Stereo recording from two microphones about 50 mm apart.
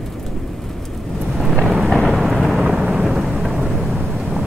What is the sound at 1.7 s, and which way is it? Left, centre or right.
Thunder, centre.